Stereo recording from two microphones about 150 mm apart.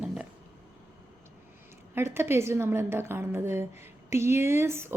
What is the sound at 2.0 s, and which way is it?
Speech, 15° right (ahead or behind).